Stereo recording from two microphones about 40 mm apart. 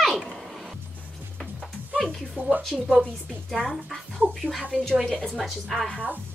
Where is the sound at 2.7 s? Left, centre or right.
Centre.